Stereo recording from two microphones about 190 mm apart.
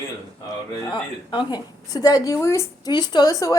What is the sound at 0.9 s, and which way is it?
A woman's voice, 25° left (ahead or behind).